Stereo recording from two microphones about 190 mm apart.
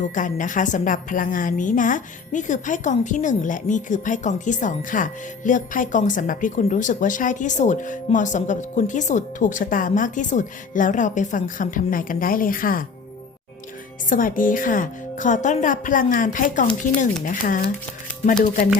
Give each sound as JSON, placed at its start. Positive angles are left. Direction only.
{"t": 0.0, "sound": "a woman's voice", "side_deg": 40}
{"t": 14.1, "sound": "a woman's voice", "side_deg": 45}